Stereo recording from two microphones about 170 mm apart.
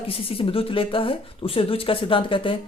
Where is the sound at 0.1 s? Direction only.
35° left (ahead or behind).